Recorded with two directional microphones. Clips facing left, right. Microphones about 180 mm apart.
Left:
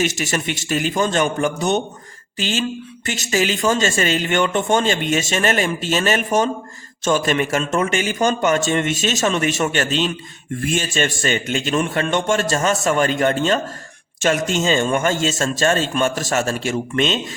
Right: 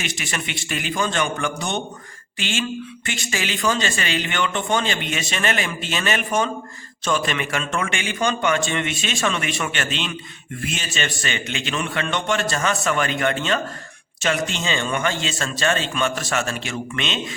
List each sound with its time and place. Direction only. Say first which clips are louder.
0.0 s speech: left 8 dB; 45° left (ahead or behind)
2.4 s a sound: left 4 dB; 40° left (ahead or behind)
3.1 s speech: left 8 dB; 40° left (ahead or behind)